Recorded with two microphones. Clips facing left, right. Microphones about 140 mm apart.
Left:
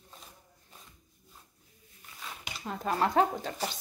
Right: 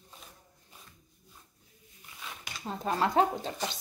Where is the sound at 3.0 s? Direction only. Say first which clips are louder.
Even; 25° right (ahead or behind).